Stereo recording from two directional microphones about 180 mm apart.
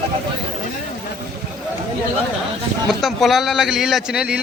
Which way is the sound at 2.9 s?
Centre (ahead or behind).